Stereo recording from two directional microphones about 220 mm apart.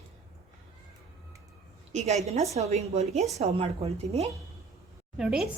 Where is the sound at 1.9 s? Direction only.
30° right (ahead or behind).